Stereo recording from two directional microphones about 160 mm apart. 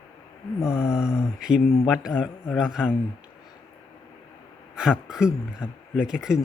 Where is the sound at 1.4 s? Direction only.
5° right (ahead or behind).